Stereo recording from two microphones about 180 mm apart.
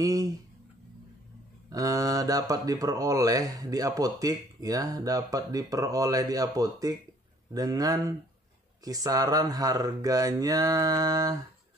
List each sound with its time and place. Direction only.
0.0 s speech: 20° right (ahead or behind)
1.7 s speech: 20° right (ahead or behind)